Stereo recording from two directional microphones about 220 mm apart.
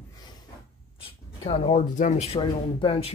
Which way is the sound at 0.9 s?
25° left (ahead or behind).